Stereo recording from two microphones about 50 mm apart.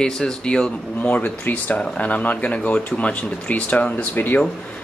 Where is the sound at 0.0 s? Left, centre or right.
Centre.